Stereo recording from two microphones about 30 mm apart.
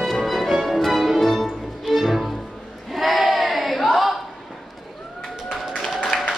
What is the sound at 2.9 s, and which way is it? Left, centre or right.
Crowd, centre.